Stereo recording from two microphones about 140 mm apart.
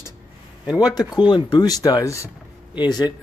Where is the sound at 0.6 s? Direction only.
10° right (ahead or behind).